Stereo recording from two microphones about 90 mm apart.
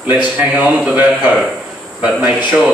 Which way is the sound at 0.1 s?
15° right (ahead or behind).